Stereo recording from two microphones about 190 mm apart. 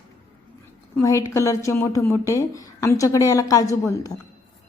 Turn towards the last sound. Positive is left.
turn(degrees=15)  # may be behind; listen again after turning